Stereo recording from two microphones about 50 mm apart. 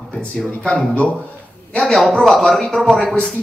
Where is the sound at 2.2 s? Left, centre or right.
Centre.